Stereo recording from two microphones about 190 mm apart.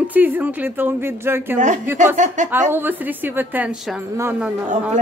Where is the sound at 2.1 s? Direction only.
40° right (ahead or behind).